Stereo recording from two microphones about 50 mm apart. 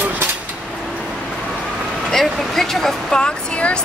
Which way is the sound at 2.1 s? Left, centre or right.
Centre.